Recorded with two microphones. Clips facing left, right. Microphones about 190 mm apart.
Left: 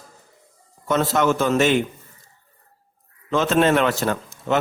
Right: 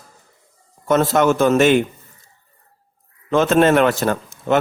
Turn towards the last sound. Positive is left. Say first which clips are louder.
# right 3 dB
turn(degrees=-50)  # may be behind; listen again after turning